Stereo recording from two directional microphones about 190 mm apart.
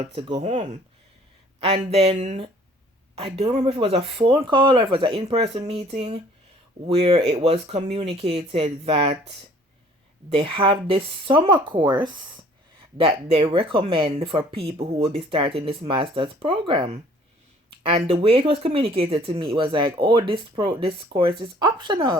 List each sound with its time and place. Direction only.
0.2 s speech: 35° right (ahead or behind)
10.2 s speech: 30° right (ahead or behind)